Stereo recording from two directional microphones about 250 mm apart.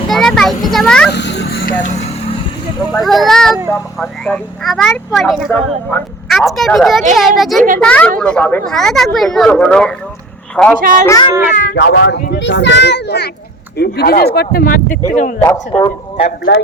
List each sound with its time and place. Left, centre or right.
0.1 s a child's voice: centre
1.1 s vehicle: left
2.9 s speech: centre
10.8 s speech: right
11.0 s speech: centre
11.5 s a child's voice: left
15.4 s speech: centre
16.5 s speech: left